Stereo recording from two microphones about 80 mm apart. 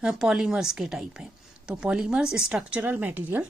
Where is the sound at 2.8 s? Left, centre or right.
Centre.